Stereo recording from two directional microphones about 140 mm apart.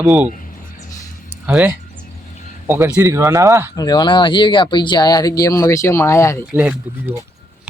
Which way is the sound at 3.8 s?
30° left (ahead or behind).